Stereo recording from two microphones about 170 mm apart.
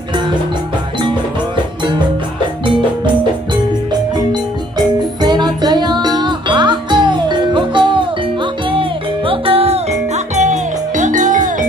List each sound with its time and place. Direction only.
4.3 s music: 25° right (ahead or behind)
10.3 s music: 45° right (ahead or behind)